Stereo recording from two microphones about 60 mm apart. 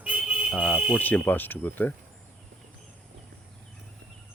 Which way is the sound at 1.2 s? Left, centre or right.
Left.